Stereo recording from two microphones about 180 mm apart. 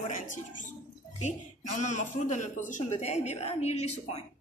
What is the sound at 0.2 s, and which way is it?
A woman's voice, 45° left (ahead or behind).